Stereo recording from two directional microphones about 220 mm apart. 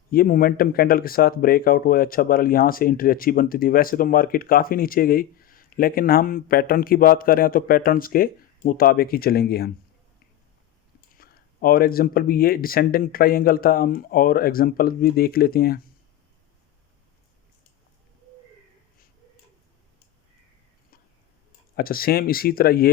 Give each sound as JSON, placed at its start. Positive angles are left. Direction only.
{"t": 0.1, "sound": "speech", "side_deg": 40}
{"t": 11.2, "sound": "speech", "side_deg": 40}
{"t": 21.8, "sound": "speech", "side_deg": 40}